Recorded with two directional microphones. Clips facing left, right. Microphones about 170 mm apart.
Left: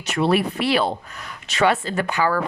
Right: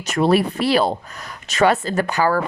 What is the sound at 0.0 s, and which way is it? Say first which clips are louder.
Speech: right 3 dB; 45° right (ahead or behind).